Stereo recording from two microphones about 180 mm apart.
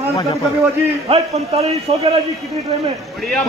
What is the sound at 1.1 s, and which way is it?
A man's voice, 35° right (ahead or behind).